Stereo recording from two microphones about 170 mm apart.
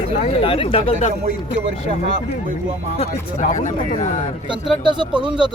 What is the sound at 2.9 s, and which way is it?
Speech, 45° left (ahead or behind).